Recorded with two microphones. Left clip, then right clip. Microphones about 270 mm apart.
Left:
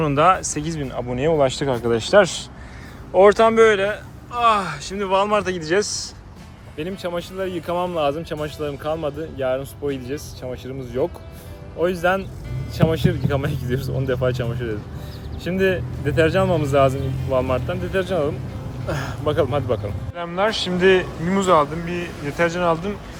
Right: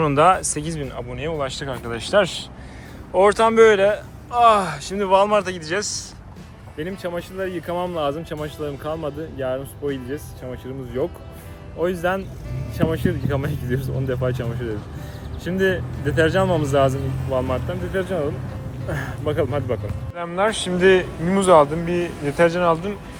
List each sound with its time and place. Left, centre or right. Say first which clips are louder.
0.0 s a man's voice: right 1 dB; centre
6.7 s a man's voice: left 1 dB; centre